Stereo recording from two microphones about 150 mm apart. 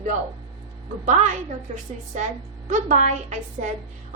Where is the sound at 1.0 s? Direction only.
55° right (ahead or behind).